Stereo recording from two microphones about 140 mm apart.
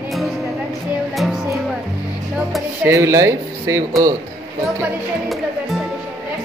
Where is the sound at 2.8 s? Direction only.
20° right (ahead or behind).